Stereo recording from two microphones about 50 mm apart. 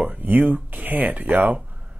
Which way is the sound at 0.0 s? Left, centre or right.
Right.